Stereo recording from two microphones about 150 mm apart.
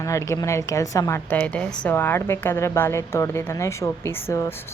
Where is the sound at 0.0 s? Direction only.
20° left (ahead or behind).